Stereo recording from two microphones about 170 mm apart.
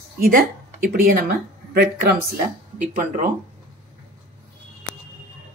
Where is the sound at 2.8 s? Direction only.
50° right (ahead or behind).